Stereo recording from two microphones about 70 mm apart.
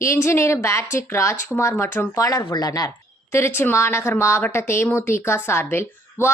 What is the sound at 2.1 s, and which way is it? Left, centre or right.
Speech, left.